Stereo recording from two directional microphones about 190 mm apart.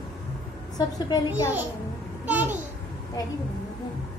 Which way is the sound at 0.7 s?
20° left (ahead or behind).